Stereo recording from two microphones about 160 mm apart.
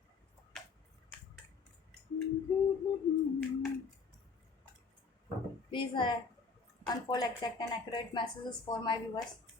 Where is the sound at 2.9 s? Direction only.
25° left (ahead or behind).